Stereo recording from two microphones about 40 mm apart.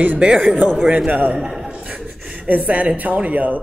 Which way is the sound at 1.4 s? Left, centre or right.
Centre.